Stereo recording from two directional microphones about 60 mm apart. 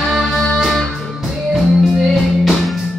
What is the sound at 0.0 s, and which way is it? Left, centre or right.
Music, centre.